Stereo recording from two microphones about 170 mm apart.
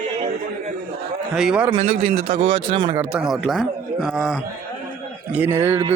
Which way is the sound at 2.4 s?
30° right (ahead or behind).